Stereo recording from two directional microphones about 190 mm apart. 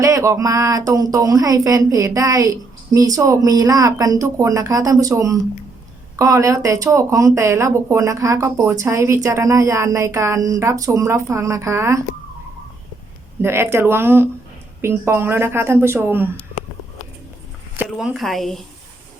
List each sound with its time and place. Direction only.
0.0 s speech: 15° right (ahead or behind)
13.4 s speech: 15° right (ahead or behind)
17.7 s speech: centre (ahead or behind)